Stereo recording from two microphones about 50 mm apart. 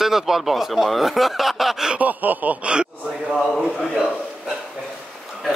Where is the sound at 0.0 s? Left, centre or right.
Centre.